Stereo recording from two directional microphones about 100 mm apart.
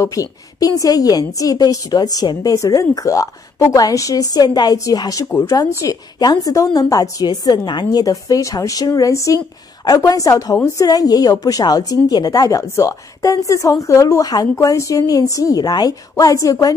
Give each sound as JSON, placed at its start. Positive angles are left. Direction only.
{"t": 0.0, "sound": "a woman's voice", "side_deg": 35}